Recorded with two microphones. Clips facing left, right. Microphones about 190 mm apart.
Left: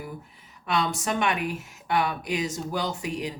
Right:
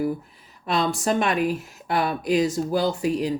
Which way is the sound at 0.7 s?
35° right (ahead or behind).